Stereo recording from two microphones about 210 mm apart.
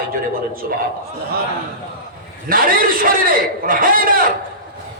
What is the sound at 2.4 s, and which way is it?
A man's voice, 45° right (ahead or behind).